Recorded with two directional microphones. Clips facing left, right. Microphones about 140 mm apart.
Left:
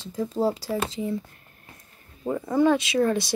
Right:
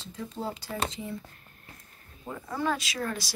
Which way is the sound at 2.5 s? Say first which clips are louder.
Left 10 dB; 25° left (ahead or behind).